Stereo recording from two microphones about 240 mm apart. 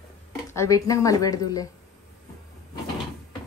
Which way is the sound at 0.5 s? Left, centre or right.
Centre.